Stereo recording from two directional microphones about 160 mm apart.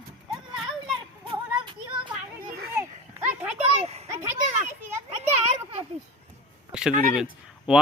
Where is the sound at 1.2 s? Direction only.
30° right (ahead or behind).